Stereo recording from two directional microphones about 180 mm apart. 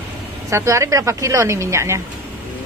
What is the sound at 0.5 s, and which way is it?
A woman's voice, 15° right (ahead or behind).